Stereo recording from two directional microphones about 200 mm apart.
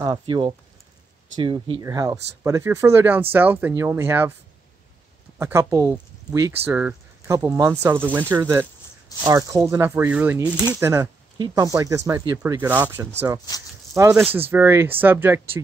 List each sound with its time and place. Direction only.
0.0 s speech: 20° right (ahead or behind)
5.4 s speech: 15° right (ahead or behind)